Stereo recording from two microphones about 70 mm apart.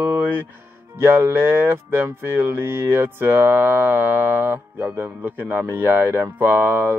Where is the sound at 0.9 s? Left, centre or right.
Right.